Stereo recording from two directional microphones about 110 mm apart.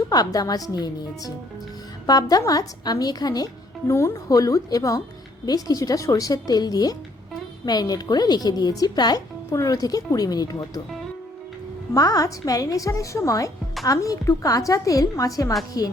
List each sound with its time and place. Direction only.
0.1 s speech: 35° left (ahead or behind)
11.9 s speech: 35° left (ahead or behind)